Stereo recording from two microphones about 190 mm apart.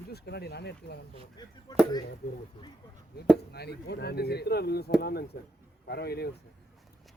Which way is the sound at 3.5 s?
60° left (ahead or behind).